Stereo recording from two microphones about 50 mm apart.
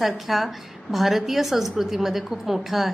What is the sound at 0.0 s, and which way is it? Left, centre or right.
A woman's voice, centre.